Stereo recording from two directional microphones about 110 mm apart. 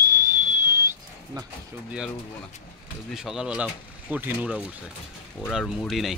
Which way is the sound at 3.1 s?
5° right (ahead or behind).